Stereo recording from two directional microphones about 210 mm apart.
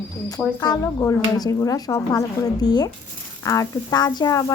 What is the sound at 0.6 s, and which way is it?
Speech, 15° left (ahead or behind).